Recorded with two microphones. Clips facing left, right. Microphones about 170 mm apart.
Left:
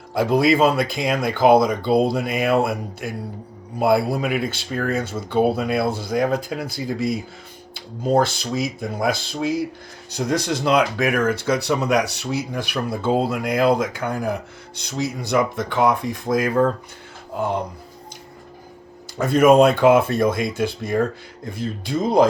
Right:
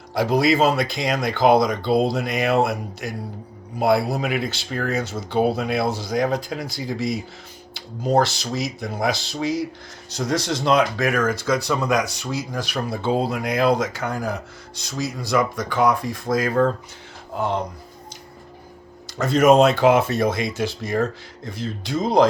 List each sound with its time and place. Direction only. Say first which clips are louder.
0.1 s speech: left 1 dB; 55° left (ahead or behind)
19.1 s speech: left 1 dB; 55° left (ahead or behind)